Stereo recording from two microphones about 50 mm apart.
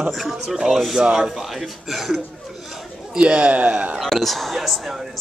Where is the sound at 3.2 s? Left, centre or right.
Right.